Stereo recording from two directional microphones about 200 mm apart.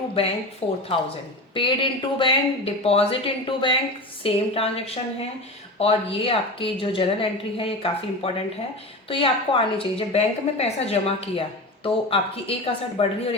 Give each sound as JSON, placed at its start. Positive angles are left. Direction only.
{"t": 0.2, "sound": "a woman's voice", "side_deg": 30}